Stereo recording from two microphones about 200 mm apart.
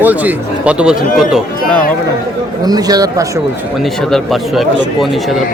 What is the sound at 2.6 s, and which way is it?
Speech, 20° right (ahead or behind).